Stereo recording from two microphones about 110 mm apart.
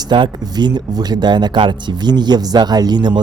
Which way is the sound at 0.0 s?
40° right (ahead or behind).